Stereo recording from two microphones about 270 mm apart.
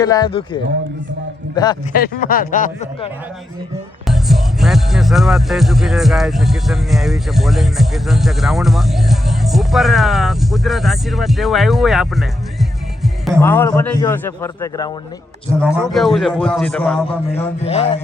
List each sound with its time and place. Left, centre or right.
0.0 s a man's voice: centre
1.9 s speech: left
4.0 s speech: centre
15.6 s speech: centre
17.6 s speech: left